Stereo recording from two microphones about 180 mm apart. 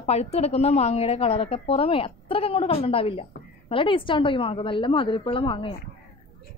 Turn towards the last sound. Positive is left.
turn(degrees=30)  # may be behind; listen again after turning